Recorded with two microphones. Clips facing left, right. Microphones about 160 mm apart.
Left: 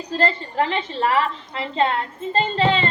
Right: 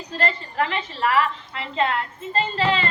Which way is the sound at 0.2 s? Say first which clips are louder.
Left 3 dB; 30° left (ahead or behind).